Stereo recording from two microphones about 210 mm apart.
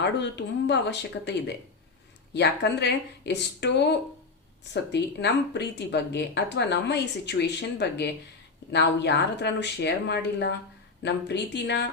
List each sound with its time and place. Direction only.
0.0 s speech: 55° left (ahead or behind)